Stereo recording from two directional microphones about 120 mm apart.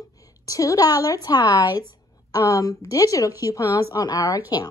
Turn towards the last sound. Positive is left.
turn(degrees=30)  # may be behind; listen again after turning